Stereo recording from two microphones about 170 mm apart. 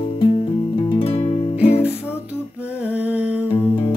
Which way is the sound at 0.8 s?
30° left (ahead or behind).